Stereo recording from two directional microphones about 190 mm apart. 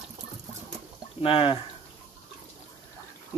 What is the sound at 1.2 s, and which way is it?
Speech, 30° left (ahead or behind).